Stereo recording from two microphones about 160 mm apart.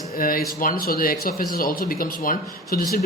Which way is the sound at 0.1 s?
65° left (ahead or behind).